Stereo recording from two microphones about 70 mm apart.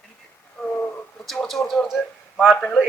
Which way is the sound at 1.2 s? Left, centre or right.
Centre.